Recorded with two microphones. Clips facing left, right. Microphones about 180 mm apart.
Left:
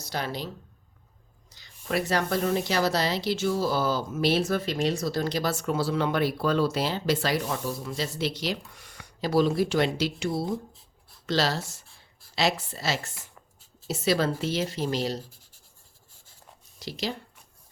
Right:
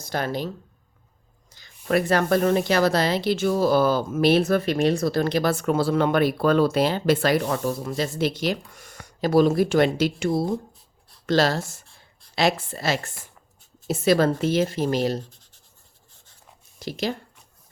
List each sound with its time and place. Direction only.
0.0 s a woman's voice: 50° right (ahead or behind)
16.8 s a woman's voice: 50° right (ahead or behind)